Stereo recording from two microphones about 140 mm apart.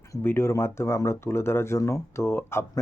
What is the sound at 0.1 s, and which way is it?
Speech, 15° left (ahead or behind).